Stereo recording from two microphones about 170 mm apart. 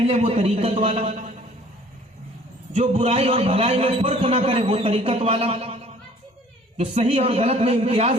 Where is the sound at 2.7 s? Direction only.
35° right (ahead or behind).